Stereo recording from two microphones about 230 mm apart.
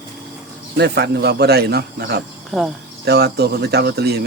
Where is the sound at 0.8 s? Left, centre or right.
Right.